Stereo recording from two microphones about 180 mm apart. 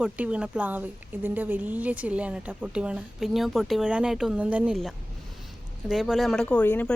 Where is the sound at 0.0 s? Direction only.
5° right (ahead or behind).